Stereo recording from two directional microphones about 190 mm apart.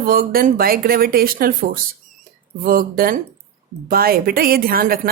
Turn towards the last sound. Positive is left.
turn(degrees=-50)  # may be behind; listen again after turning